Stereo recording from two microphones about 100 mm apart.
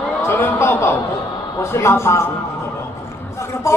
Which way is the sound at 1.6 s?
25° left (ahead or behind).